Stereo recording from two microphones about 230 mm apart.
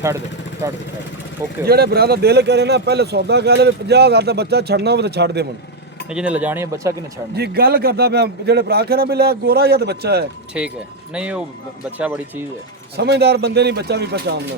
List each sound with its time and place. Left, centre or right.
1.6 s speech: right
6.1 s speech: centre
7.3 s speech: right
10.5 s speech: centre
13.0 s speech: right